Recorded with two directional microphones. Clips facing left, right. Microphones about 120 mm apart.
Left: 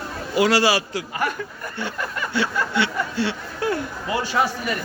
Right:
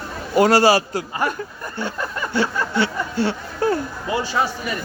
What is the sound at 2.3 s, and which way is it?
Speech, 40° right (ahead or behind).